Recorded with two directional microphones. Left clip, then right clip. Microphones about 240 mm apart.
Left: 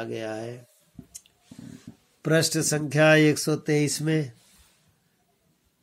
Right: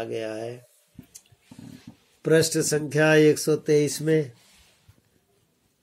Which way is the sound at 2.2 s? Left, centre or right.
Left.